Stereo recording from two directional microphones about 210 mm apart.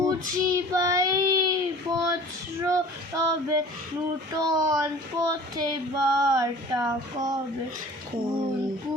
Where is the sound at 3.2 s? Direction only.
15° right (ahead or behind).